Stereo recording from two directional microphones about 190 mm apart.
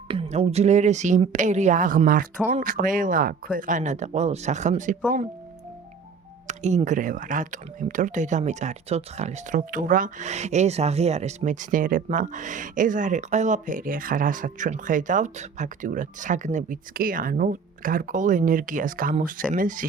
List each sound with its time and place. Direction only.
0.1 s speech: 30° right (ahead or behind)
6.5 s speech: 40° right (ahead or behind)